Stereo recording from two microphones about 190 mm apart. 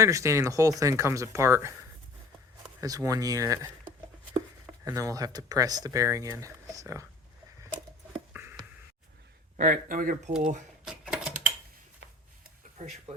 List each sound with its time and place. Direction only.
0.0 s speech: 15° right (ahead or behind)
2.8 s speech: 20° right (ahead or behind)
4.9 s speech: 15° right (ahead or behind)
8.3 s a sound: 10° right (ahead or behind)
9.6 s speech: 45° right (ahead or behind)
10.8 s a sound: 5° right (ahead or behind)
13.1 s speech: 30° right (ahead or behind)